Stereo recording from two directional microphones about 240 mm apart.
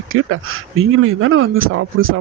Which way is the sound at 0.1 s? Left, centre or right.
Right.